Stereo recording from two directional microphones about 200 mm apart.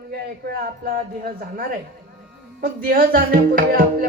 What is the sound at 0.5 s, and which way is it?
Speech, 45° right (ahead or behind).